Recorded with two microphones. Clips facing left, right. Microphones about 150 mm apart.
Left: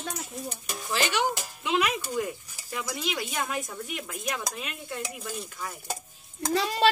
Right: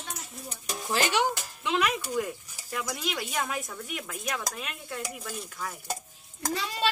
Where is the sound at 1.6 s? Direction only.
5° left (ahead or behind).